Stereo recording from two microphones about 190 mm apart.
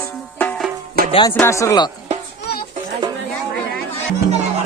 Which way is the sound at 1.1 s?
25° left (ahead or behind).